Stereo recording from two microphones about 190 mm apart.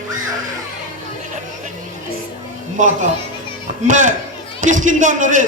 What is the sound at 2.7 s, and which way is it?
A man's voice, 40° right (ahead or behind).